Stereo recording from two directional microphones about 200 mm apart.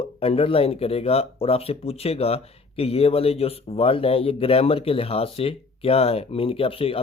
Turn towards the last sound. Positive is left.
turn(degrees=30)  # may be behind; listen again after turning